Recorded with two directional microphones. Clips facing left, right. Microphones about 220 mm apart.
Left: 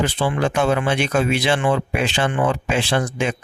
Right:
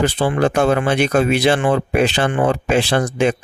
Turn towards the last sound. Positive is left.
turn(degrees=-40)  # may be behind; listen again after turning